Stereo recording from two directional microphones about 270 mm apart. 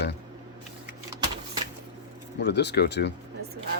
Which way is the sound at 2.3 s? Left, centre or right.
Left.